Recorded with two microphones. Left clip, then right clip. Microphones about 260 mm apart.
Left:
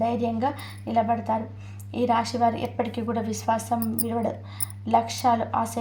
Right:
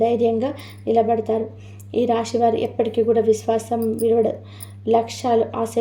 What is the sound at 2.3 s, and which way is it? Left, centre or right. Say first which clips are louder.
A woman's voice: right 5 dB; left.